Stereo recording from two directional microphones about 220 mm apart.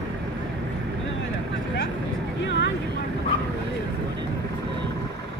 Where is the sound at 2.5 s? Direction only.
55° left (ahead or behind).